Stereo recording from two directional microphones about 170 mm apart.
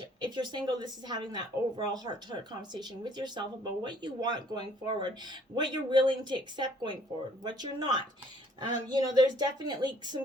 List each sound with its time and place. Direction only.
0.2 s speech: 25° right (ahead or behind)